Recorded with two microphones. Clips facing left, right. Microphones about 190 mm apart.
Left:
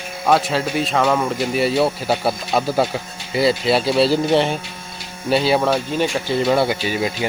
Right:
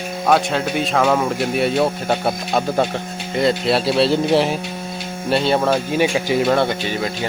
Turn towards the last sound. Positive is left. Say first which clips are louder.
# left 1 dB
turn(degrees=10)  # may be behind; listen again after turning